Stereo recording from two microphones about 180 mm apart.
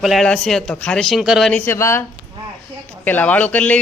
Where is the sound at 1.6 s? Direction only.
15° left (ahead or behind).